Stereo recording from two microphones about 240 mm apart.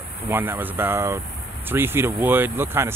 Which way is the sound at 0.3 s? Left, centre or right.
Centre.